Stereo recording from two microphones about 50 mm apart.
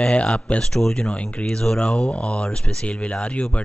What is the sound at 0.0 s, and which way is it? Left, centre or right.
Speech, left.